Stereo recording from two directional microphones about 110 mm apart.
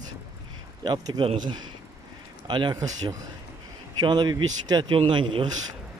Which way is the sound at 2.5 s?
40° right (ahead or behind).